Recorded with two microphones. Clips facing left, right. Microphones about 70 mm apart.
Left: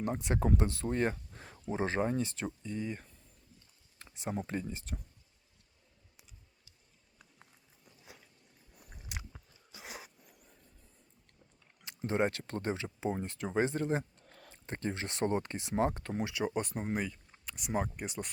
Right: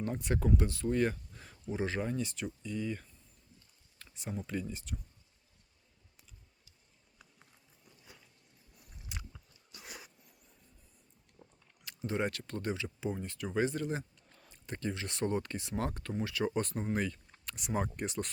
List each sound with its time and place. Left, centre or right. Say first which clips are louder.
0.0 s speech: left 1 dB; left
3.9 s a sound: left 4 dB; left
4.4 s speech: right 1 dB; left
11.9 s speech: left 3 dB; left
14.3 s a sound: left 5 dB; left
14.5 s speech: left 1 dB; left
16.2 s speech: right 1 dB; centre